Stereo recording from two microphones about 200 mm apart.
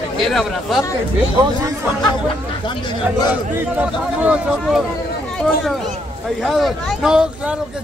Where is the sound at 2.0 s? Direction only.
25° left (ahead or behind).